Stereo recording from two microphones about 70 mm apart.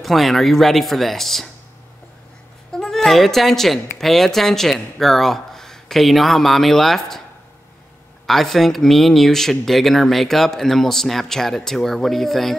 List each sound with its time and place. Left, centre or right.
0.0 s speech: centre
2.7 s a woman's voice: centre
8.3 s speech: centre